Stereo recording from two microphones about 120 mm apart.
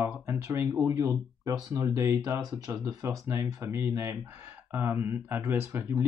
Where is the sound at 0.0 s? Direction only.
20° right (ahead or behind).